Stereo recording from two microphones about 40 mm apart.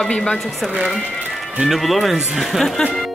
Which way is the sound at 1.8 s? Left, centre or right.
Centre.